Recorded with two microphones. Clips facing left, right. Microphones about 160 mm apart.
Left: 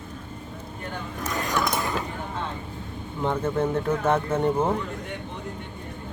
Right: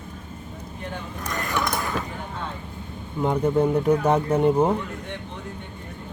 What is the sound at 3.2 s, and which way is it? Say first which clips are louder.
Speech: right 4 dB; 15° right (ahead or behind).